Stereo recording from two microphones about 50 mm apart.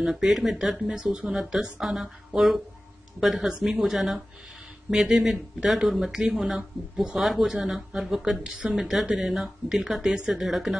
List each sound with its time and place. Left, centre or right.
0.0 s speech: centre
1.0 s speech: right
1.3 s speech: centre
3.7 s speech: centre